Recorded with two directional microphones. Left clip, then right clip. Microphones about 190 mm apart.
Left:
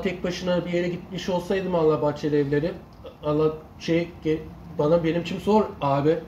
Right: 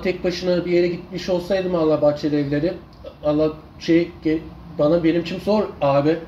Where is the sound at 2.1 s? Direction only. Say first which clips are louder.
Right 3 dB; 30° left (ahead or behind).